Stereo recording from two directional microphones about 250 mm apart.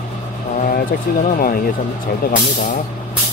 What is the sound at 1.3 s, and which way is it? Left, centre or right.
Speech, left.